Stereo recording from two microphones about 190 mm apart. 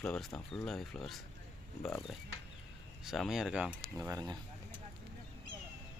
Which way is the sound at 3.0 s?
Centre (ahead or behind).